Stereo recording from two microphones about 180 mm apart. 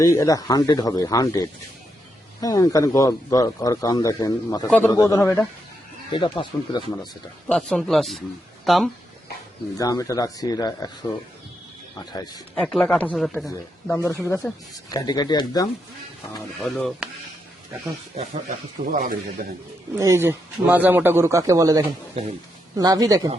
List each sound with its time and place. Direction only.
0.0 s a man's voice: 20° left (ahead or behind)
6.1 s a man's voice: 25° left (ahead or behind)
7.0 s speech: 5° left (ahead or behind)
9.7 s a man's voice: 20° left (ahead or behind)
11.9 s a man's voice: 20° left (ahead or behind)
12.5 s speech: 5° left (ahead or behind)
14.8 s a man's voice: 20° left (ahead or behind)
16.6 s speech: centre (ahead or behind)
18.2 s speech: 45° right (ahead or behind)
20.0 s speech: 15° right (ahead or behind)